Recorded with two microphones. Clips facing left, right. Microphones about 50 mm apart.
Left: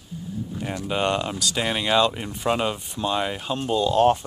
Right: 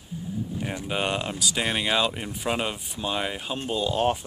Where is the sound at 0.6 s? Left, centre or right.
Centre.